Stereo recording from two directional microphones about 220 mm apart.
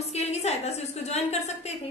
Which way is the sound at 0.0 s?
30° left (ahead or behind).